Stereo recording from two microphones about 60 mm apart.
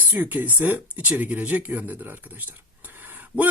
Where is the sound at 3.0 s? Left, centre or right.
Right.